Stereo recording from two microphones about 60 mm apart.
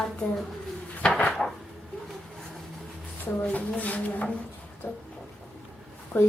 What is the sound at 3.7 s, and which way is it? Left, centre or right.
Speech, left.